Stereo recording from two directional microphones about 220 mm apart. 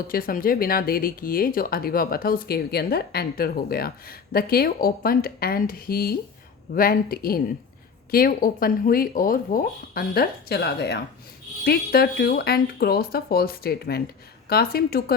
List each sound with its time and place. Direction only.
0.1 s speech: 40° left (ahead or behind)